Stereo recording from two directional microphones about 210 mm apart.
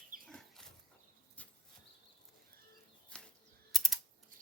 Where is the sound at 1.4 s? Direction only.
5° left (ahead or behind).